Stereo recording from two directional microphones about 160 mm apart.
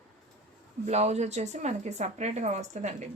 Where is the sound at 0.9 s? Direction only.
45° right (ahead or behind).